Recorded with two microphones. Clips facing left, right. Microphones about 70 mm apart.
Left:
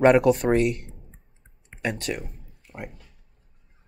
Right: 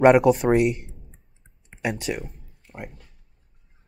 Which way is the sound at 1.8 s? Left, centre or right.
Centre.